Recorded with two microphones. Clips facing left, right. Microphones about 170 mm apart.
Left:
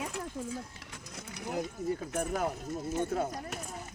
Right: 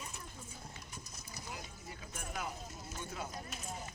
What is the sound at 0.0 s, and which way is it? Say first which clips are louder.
Mechanisms: left 13 dB; 90° left.